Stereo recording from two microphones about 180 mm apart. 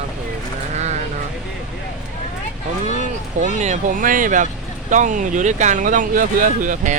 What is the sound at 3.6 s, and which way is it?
Speech, 45° right (ahead or behind).